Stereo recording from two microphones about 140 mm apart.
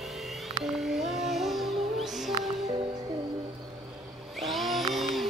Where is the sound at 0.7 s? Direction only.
Centre (ahead or behind).